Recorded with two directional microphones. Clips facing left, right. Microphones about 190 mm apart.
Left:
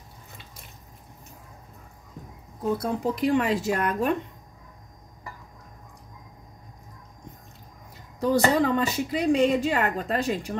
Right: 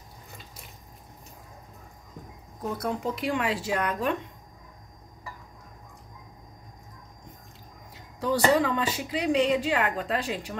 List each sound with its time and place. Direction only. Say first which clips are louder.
2.8 s speech: left 4 dB; 40° left (ahead or behind)
8.2 s speech: left 2 dB; 45° left (ahead or behind)